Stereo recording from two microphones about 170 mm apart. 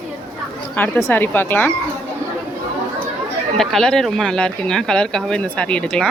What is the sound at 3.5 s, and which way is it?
Speech, centre (ahead or behind).